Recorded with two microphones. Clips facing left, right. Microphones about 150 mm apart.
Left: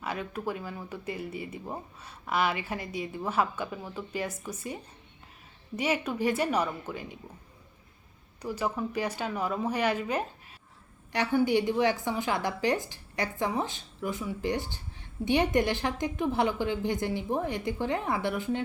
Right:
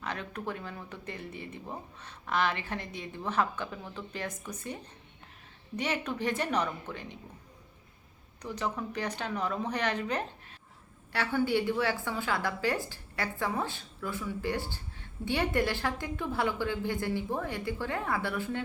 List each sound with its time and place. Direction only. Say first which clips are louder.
0.0 s a woman's voice: left 3 dB; 10° left (ahead or behind)
8.4 s a woman's voice: left 3 dB; 10° left (ahead or behind)